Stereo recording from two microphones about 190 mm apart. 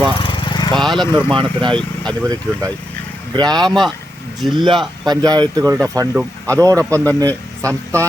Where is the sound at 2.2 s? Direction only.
20° right (ahead or behind).